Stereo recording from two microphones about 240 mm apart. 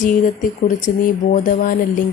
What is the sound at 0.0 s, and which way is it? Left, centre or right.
Speech, left.